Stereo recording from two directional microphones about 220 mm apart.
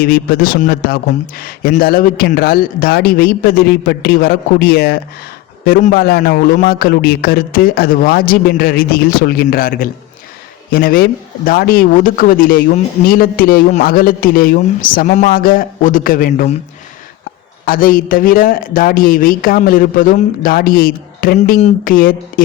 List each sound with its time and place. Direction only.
0.0 s speech: 40° left (ahead or behind)
17.7 s speech: 40° left (ahead or behind)